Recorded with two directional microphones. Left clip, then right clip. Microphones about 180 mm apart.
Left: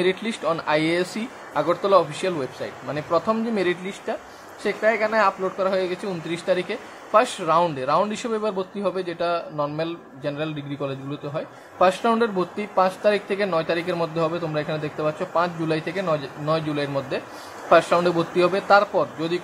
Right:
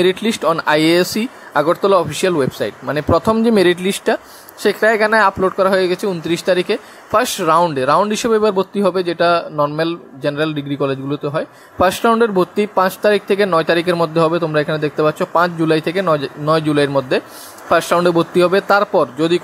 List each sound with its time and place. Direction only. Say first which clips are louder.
0.0 s a man's voice: right 8 dB; 40° right (ahead or behind); by 4.2 s 55° right (ahead or behind)
4.6 s a man's voice: right 8 dB; 45° right (ahead or behind)